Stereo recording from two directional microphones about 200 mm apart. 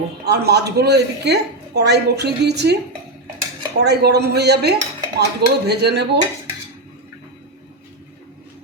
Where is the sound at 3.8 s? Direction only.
55° right (ahead or behind).